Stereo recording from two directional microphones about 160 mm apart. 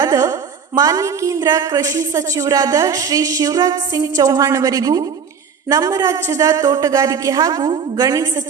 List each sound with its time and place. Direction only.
0.0 s a woman's voice: 25° right (ahead or behind)